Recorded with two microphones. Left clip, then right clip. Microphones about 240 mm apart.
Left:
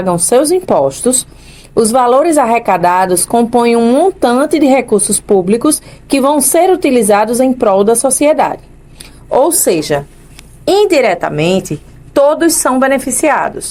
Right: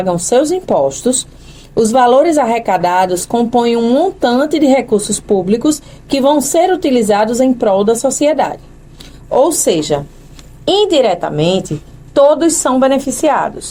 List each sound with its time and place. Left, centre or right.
0.0 s speech: left
9.0 s a sound: left
10.8 s a woman's voice: left